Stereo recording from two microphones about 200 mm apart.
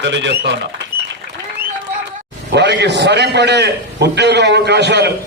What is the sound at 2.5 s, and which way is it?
A man's voice, 55° right (ahead or behind).